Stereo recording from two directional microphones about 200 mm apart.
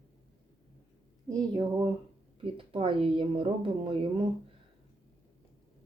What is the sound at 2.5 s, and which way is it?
A woman's voice, 25° right (ahead or behind).